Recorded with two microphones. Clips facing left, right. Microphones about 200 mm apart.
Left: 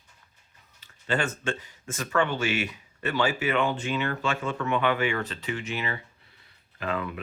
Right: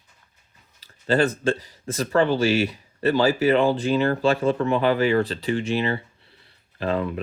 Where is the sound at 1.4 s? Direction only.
35° right (ahead or behind).